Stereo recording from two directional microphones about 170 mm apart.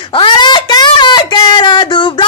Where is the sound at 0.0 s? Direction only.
30° left (ahead or behind).